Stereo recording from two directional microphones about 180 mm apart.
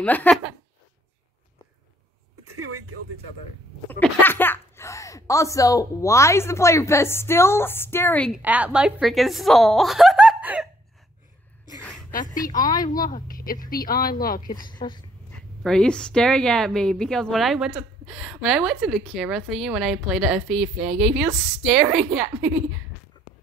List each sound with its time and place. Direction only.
0.0 s speech: 10° left (ahead or behind)
3.9 s speech: 10° left (ahead or behind)
8.3 s a woman's voice: 10° right (ahead or behind)
12.6 s speech: 20° left (ahead or behind)
12.9 s speech: 50° left (ahead or behind)
14.8 s speech: 25° left (ahead or behind)
15.6 s a woman's voice: 5° left (ahead or behind)